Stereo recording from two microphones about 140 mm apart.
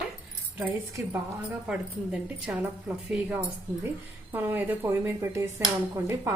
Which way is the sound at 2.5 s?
10° right (ahead or behind).